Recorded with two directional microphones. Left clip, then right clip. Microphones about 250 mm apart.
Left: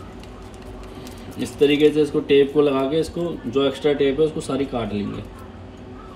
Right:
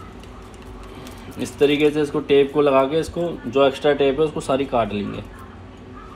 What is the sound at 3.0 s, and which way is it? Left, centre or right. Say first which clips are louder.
Speech: even; centre.